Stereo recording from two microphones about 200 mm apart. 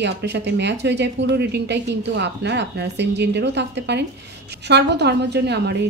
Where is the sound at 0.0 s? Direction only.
60° right (ahead or behind).